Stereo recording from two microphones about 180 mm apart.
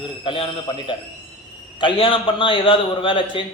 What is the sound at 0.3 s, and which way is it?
A man's voice, 30° left (ahead or behind).